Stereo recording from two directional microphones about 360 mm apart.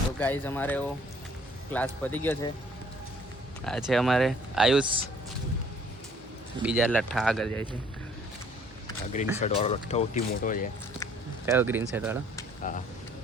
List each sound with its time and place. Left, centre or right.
0.2 s speech: centre
3.6 s speech: centre
6.6 s speech: centre
9.1 s speech: centre
11.4 s speech: centre
12.7 s speech: left